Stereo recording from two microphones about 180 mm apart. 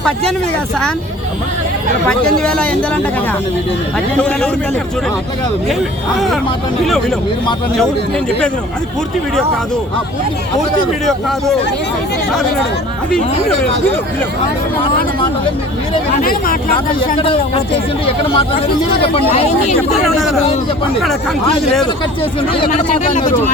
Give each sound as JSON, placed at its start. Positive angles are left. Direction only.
{"t": 2.0, "sound": "speech", "side_deg": 5}
{"t": 4.2, "sound": "a man's voice", "side_deg": 5}
{"t": 6.1, "sound": "speech", "side_deg": 0}
{"t": 11.0, "sound": "speech", "side_deg": 0}
{"t": 16.2, "sound": "speech", "side_deg": 55}
{"t": 17.2, "sound": "speech", "side_deg": 30}
{"t": 20.1, "sound": "speech", "side_deg": 0}